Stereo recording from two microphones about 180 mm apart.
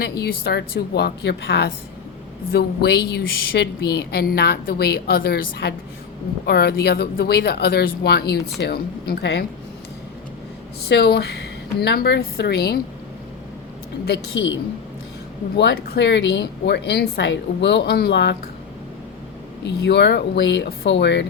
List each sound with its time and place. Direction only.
0.0 s a woman's voice: 60° left (ahead or behind)
10.8 s a woman's voice: 65° left (ahead or behind)
14.0 s speech: 75° left (ahead or behind)
15.5 s speech: 65° left (ahead or behind)
19.6 s speech: 75° left (ahead or behind)